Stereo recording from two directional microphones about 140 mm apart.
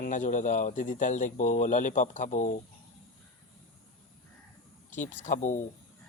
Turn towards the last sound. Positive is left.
turn(degrees=60)  # may be behind; listen again after turning